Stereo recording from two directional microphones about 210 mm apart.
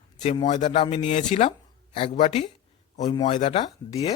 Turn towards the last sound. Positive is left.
turn(degrees=25)  # may be behind; listen again after turning